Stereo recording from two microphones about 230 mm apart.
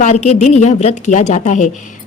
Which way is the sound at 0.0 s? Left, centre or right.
Left.